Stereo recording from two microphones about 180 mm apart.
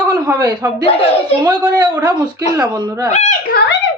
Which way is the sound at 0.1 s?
20° right (ahead or behind).